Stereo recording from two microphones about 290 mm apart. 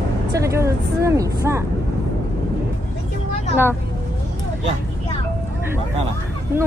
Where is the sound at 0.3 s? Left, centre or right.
Centre.